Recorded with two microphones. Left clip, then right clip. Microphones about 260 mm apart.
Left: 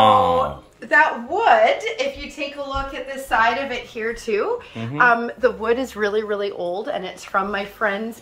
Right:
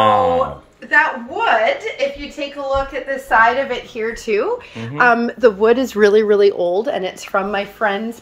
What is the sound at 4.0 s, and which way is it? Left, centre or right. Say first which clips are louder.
Speech: right 3 dB; right.